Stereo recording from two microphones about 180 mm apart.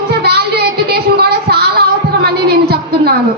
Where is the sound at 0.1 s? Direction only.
65° right (ahead or behind).